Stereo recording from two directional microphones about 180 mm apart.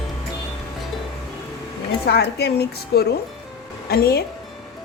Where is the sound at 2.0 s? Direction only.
60° left (ahead or behind).